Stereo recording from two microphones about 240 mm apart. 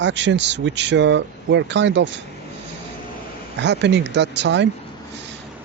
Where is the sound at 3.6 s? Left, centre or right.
Right.